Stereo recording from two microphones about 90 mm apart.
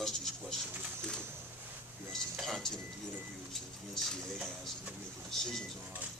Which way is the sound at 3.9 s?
5° left (ahead or behind).